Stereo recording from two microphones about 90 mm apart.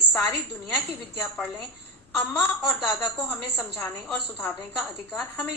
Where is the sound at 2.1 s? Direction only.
15° left (ahead or behind).